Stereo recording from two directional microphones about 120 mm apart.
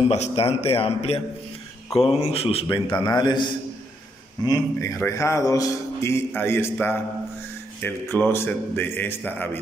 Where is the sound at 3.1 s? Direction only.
35° left (ahead or behind).